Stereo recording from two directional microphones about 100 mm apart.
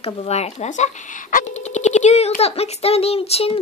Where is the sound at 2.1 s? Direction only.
90° left.